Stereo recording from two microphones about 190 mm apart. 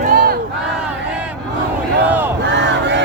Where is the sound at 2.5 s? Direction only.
65° right (ahead or behind).